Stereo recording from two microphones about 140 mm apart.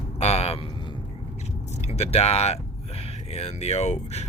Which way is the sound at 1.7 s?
50° left (ahead or behind).